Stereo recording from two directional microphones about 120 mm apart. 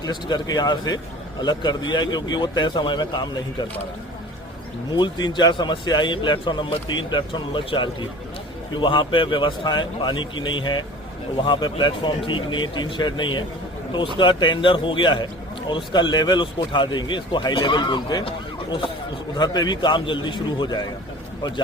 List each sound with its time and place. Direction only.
0.0 s speech: 35° left (ahead or behind)
4.9 s speech: 35° left (ahead or behind)